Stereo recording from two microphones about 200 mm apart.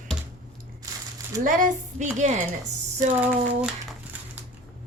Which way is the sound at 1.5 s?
40° right (ahead or behind).